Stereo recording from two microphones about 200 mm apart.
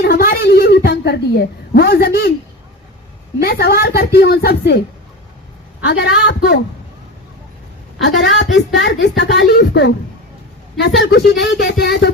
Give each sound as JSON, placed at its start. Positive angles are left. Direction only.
{"t": 0.0, "sound": "a sound", "side_deg": 50}
{"t": 3.4, "sound": "a woman's voice", "side_deg": 50}
{"t": 5.8, "sound": "speech", "side_deg": 60}
{"t": 8.4, "sound": "speech", "side_deg": 60}